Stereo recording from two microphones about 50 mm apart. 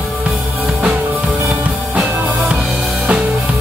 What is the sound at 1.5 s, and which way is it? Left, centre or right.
Drum, right.